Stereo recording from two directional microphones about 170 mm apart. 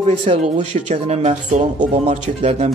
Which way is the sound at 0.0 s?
40° right (ahead or behind).